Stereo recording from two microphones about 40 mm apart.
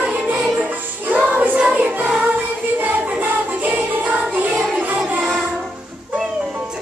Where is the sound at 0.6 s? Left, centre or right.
Right.